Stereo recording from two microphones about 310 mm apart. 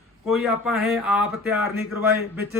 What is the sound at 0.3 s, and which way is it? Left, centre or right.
A man's voice, centre.